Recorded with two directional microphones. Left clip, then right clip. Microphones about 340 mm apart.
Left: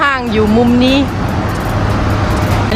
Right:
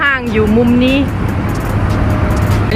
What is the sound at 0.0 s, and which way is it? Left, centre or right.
Speech, centre.